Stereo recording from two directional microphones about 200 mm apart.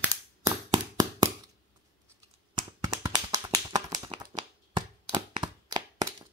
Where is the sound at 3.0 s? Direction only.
20° right (ahead or behind).